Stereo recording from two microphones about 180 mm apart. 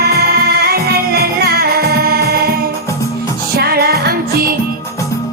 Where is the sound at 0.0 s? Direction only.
60° right (ahead or behind).